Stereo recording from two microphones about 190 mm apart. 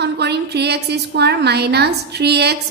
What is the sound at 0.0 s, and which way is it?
A woman's voice, 60° right (ahead or behind).